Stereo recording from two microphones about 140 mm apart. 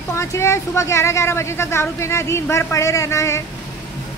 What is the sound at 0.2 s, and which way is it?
A woman's voice, 20° left (ahead or behind).